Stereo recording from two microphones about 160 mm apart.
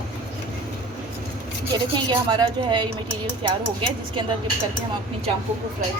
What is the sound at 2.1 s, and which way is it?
Speech, 25° right (ahead or behind).